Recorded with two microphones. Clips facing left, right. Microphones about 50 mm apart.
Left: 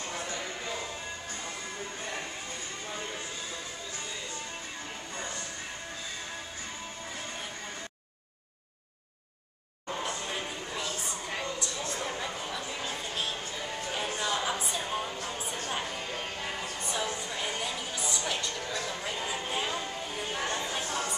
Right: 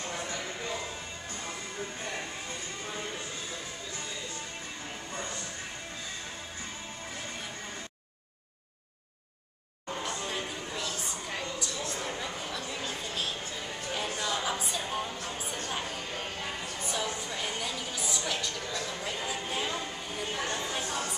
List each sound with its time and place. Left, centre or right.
0.3 s music: left
10.0 s a sound: centre
13.9 s music: centre
19.0 s chatter: centre